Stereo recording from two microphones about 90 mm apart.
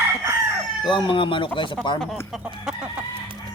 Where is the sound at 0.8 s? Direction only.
65° left (ahead or behind).